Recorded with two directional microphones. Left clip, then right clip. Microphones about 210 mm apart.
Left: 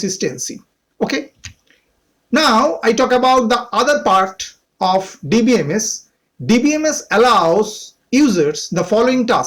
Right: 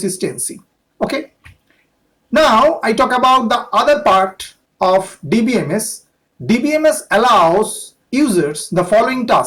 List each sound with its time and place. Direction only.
0.0 s speech: 30° left (ahead or behind)
2.3 s speech: 30° left (ahead or behind)